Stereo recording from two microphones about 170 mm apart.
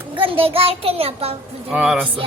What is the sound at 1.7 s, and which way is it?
Speech, 5° right (ahead or behind).